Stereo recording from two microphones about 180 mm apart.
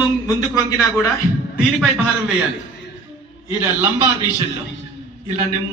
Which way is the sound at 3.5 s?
10° right (ahead or behind).